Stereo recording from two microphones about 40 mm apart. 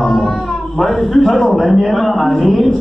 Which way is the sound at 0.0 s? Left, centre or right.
Left.